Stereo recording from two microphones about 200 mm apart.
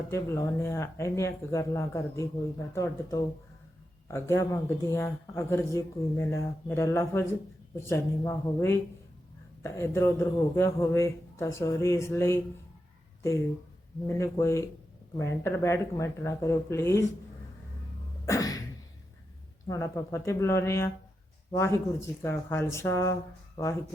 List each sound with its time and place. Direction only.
0.1 s speech: 15° left (ahead or behind)
14.1 s speech: 15° left (ahead or behind)
18.3 s cough: 20° left (ahead or behind)
19.6 s speech: 15° left (ahead or behind)